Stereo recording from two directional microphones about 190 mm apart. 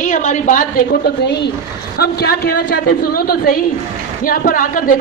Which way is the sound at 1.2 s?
65° left (ahead or behind).